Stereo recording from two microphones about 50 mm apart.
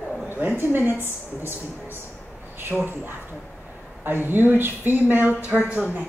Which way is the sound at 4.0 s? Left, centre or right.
Right.